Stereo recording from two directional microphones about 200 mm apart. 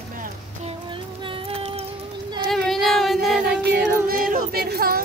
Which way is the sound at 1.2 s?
25° right (ahead or behind).